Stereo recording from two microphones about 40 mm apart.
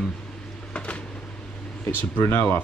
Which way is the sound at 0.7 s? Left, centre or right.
Left.